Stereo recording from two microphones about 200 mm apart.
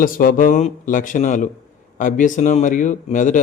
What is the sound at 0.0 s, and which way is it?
A man's voice, 45° left (ahead or behind).